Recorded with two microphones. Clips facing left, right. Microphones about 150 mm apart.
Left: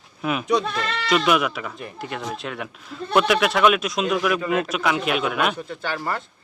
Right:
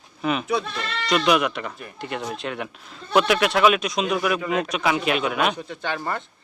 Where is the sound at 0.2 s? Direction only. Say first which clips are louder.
Left 2 dB; centre (ahead or behind).